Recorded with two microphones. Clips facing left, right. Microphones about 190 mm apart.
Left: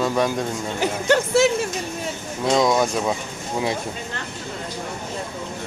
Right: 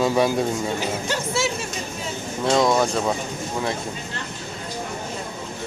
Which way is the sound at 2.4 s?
Centre (ahead or behind).